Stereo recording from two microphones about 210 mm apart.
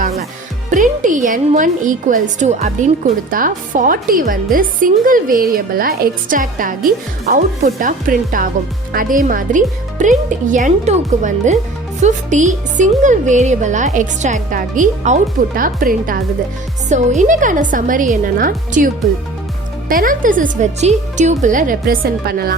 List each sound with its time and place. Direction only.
0.0 s music: 30° right (ahead or behind)
0.7 s speech: 40° right (ahead or behind)
19.9 s speech: 40° right (ahead or behind)